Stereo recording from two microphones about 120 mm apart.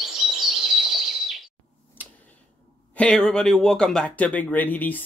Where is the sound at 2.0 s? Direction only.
15° left (ahead or behind).